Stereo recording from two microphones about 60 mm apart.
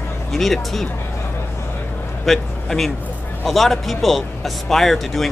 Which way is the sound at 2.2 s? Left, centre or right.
Centre.